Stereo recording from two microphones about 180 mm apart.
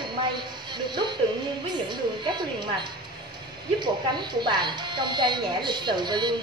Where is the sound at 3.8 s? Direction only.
25° right (ahead or behind).